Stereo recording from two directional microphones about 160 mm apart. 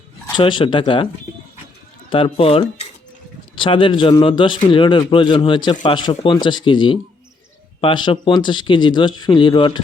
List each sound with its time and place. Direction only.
0.3 s speech: 30° left (ahead or behind)
2.0 s speech: 35° left (ahead or behind)